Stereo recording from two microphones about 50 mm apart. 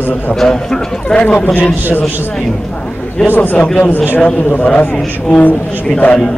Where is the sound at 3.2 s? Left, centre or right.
Left.